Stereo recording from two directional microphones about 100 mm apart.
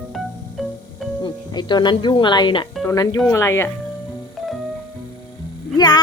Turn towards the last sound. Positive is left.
turn(degrees=45)  # may be behind; listen again after turning